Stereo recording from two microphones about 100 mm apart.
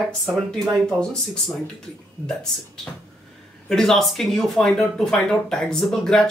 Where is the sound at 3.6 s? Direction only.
5° left (ahead or behind).